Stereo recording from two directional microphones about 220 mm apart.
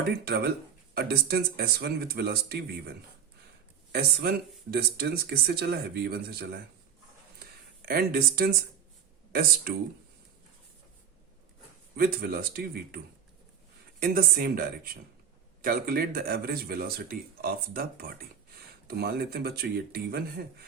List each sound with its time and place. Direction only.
0.9 s speech: 45° right (ahead or behind)
3.9 s speech: 45° right (ahead or behind)
7.9 s speech: 45° right (ahead or behind)
11.9 s speech: 45° right (ahead or behind)
14.0 s speech: 40° right (ahead or behind)